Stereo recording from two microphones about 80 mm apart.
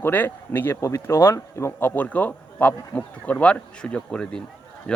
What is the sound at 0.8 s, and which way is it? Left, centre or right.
Speech, left.